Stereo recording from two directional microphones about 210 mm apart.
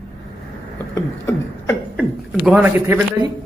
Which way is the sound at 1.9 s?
5° right (ahead or behind).